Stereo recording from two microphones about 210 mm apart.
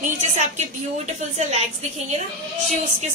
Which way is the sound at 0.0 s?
35° right (ahead or behind).